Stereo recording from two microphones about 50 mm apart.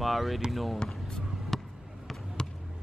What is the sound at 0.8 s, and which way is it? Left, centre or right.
Basketball bounce, centre.